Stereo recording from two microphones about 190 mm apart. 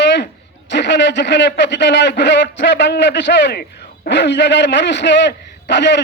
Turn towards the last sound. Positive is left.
turn(degrees=65)  # may be behind; listen again after turning